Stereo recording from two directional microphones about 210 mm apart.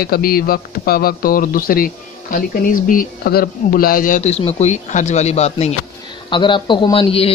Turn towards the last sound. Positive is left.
turn(degrees=25)  # may be behind; listen again after turning